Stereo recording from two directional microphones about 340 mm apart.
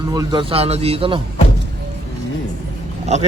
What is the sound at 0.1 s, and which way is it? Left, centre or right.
Speech, centre.